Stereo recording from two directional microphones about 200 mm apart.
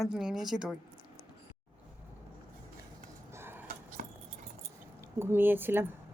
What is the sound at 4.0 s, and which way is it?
Keys jangling, 40° right (ahead or behind).